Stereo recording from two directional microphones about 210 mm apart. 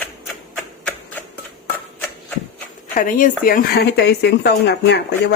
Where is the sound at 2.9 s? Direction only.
40° left (ahead or behind).